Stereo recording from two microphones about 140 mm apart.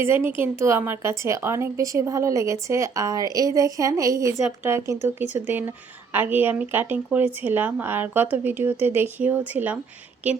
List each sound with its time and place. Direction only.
0.0 s a woman's voice: 15° right (ahead or behind)